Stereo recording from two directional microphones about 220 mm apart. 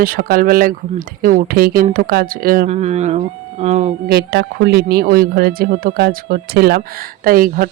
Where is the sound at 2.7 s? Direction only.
30° right (ahead or behind).